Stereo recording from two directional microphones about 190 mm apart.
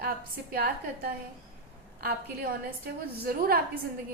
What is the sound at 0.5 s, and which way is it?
A woman's voice, 50° right (ahead or behind).